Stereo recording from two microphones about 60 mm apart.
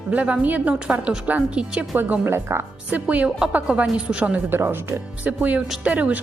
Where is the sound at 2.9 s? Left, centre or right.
Right.